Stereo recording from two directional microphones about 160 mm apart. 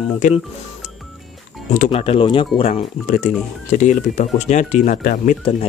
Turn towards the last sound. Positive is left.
turn(degrees=55)  # may be behind; listen again after turning